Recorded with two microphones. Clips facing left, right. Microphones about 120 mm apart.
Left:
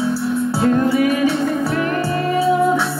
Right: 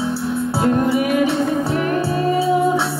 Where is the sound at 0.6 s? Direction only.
20° right (ahead or behind).